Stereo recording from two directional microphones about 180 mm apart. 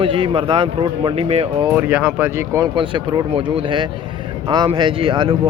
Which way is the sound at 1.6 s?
10° right (ahead or behind).